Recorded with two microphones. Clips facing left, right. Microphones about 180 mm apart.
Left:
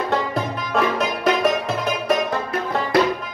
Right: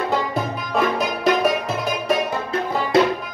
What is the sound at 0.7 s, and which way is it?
Music, centre (ahead or behind).